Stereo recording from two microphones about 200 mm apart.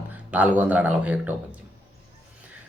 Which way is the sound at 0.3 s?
5° right (ahead or behind).